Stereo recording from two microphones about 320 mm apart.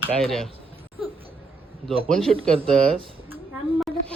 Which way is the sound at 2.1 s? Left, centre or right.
Centre.